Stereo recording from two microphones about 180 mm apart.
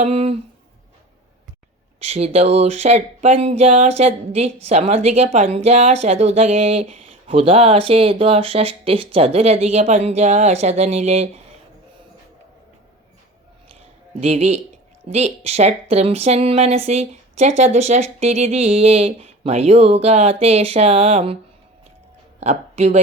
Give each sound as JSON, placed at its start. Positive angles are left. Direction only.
{"t": 0.0, "sound": "speech", "side_deg": -35}
{"t": 2.0, "sound": "speech", "side_deg": -35}
{"t": 14.2, "sound": "speech", "side_deg": -35}
{"t": 22.4, "sound": "speech", "side_deg": -35}